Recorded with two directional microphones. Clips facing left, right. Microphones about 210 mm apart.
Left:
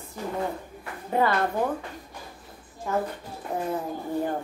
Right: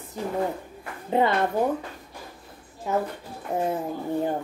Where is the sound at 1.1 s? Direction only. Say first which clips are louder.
Right 2 dB; 20° right (ahead or behind).